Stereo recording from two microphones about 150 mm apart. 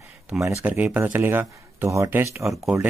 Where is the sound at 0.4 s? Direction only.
15° right (ahead or behind).